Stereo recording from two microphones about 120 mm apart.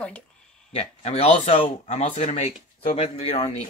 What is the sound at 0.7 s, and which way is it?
Speech, 60° left (ahead or behind).